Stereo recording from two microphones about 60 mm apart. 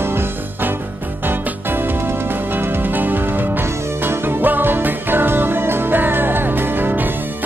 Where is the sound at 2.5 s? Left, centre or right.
Right.